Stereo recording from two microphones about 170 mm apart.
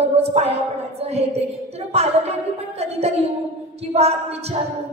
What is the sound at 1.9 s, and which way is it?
Speech, 40° right (ahead or behind).